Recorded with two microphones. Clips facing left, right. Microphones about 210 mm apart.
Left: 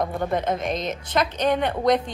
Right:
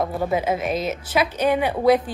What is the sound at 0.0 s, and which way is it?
A woman's voice, 5° right (ahead or behind).